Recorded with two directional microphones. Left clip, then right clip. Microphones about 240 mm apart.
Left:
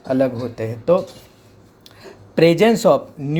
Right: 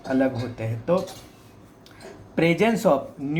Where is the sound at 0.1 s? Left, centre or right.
Left.